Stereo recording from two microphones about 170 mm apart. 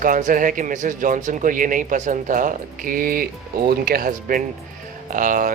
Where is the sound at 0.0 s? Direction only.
50° right (ahead or behind).